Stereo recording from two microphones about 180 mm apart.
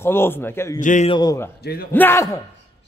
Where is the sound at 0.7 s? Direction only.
45° left (ahead or behind).